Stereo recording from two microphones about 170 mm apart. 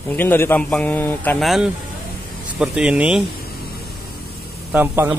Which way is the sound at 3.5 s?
65° left (ahead or behind).